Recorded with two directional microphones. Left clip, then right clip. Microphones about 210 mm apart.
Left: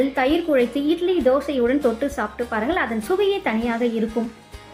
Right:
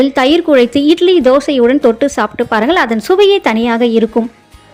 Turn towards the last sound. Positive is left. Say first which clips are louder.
# right 11 dB
turn(degrees=-45)  # may be behind; listen again after turning